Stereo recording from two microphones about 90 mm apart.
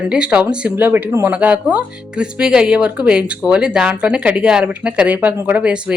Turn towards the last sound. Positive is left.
turn(degrees=-10)  # may be behind; listen again after turning